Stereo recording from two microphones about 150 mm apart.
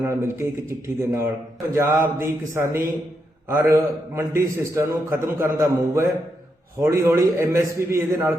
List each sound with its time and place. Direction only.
0.0 s a man's voice: 15° right (ahead or behind)